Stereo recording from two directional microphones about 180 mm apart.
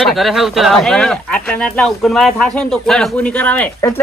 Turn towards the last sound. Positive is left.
turn(degrees=10)  # may be behind; listen again after turning